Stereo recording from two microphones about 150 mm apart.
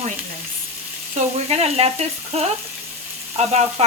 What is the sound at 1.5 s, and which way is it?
Speech, 45° right (ahead or behind).